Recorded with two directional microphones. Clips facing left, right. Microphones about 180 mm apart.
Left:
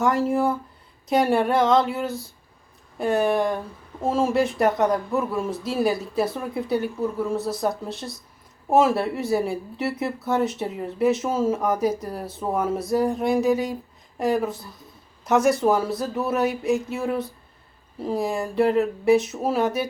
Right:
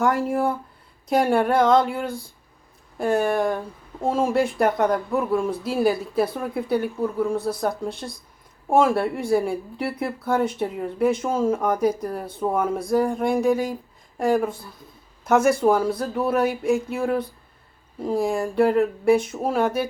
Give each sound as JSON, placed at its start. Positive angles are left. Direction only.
{"t": 0.3, "sound": "speech", "side_deg": 0}